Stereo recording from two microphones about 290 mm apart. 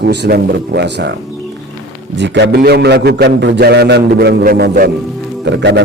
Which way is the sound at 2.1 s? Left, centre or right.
Right.